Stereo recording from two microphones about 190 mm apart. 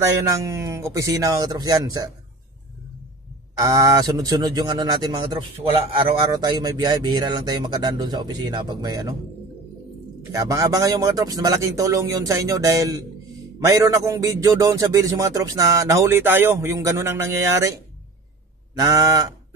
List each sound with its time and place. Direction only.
0.3 s a man's voice: 15° right (ahead or behind)
3.5 s speech: 20° right (ahead or behind)
10.3 s a man's voice: 20° right (ahead or behind)
18.8 s speech: 20° right (ahead or behind)